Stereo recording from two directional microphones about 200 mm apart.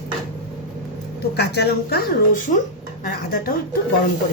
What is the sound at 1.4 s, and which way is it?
A woman's voice, 55° left (ahead or behind).